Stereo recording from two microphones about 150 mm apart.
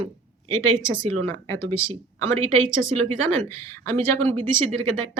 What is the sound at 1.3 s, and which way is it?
Speech, 20° left (ahead or behind).